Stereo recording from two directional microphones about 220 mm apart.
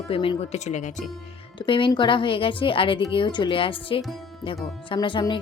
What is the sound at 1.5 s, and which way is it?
Speech, 20° left (ahead or behind).